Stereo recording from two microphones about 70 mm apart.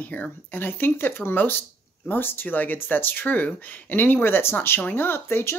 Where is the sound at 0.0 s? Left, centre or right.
Left.